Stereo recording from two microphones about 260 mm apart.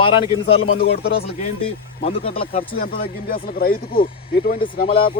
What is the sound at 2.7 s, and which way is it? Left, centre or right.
Speech, left.